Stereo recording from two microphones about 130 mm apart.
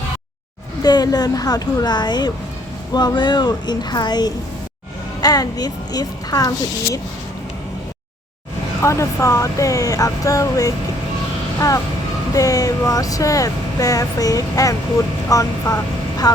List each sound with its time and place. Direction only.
0.8 s speech: 30° left (ahead or behind)
8.8 s speech: 20° left (ahead or behind)
12.3 s speech: 25° left (ahead or behind)